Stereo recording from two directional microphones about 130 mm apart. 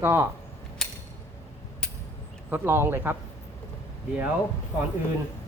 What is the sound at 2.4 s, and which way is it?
Speech, 15° right (ahead or behind).